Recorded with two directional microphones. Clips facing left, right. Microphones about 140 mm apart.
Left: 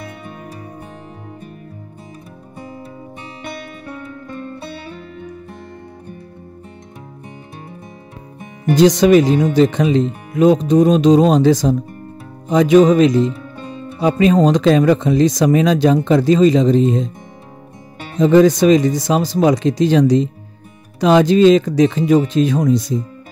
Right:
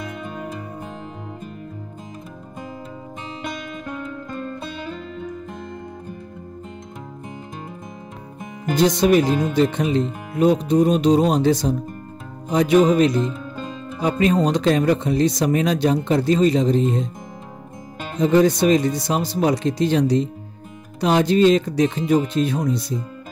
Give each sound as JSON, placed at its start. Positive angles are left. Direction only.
{"t": 8.7, "sound": "speech", "side_deg": 90}
{"t": 14.3, "sound": "speech", "side_deg": 90}
{"t": 18.2, "sound": "speech", "side_deg": 90}